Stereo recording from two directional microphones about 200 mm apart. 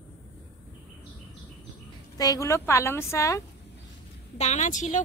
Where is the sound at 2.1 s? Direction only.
20° left (ahead or behind).